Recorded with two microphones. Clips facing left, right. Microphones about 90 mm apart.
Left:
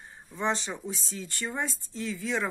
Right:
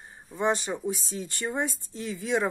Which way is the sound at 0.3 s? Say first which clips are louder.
Right 3 dB; 15° right (ahead or behind).